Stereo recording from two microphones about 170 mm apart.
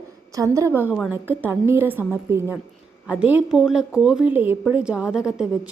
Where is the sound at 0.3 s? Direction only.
20° right (ahead or behind).